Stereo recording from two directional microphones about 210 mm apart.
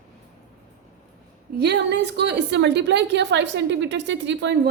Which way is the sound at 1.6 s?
55° right (ahead or behind).